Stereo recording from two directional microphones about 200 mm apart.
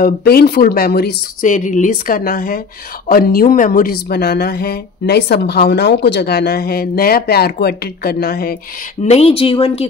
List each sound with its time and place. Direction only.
0.0 s speech: 50° left (ahead or behind)
9.0 s speech: 30° left (ahead or behind)